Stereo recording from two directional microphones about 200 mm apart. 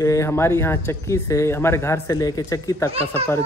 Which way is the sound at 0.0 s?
15° left (ahead or behind).